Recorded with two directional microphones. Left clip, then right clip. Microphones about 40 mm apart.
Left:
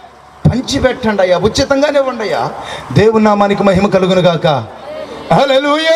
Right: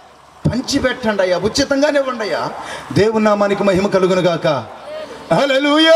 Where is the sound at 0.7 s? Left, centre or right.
Left.